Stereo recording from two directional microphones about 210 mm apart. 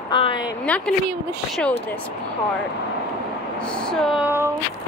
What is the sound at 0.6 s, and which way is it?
Speech, 5° left (ahead or behind).